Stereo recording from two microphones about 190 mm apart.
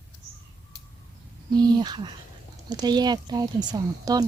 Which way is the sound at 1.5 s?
20° right (ahead or behind).